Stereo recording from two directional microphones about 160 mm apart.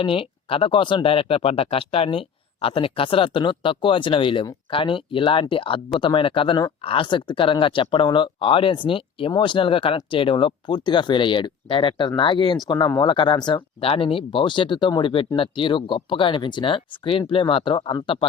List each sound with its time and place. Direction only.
0.0 s speech: 35° left (ahead or behind)